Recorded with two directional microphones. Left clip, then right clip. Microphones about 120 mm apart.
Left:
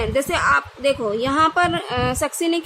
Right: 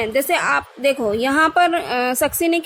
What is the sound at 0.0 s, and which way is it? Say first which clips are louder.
A woman's voice: right 1 dB; 25° right (ahead or behind).